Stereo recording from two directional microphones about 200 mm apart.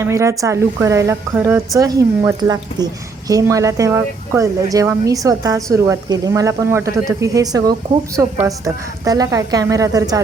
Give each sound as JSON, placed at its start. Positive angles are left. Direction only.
{"t": 0.0, "sound": "a woman's voice", "side_deg": -15}